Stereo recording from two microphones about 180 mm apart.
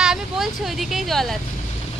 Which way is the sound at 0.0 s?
5° right (ahead or behind).